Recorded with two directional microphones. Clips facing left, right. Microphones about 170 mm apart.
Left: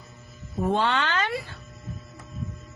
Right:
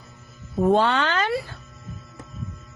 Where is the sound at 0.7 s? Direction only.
45° right (ahead or behind).